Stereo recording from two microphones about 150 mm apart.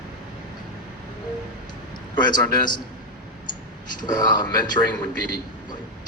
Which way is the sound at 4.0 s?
30° left (ahead or behind).